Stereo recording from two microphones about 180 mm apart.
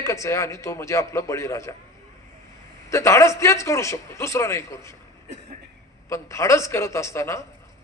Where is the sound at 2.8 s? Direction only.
15° left (ahead or behind).